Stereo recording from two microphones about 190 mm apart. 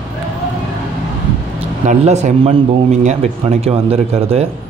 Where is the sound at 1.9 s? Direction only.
35° right (ahead or behind).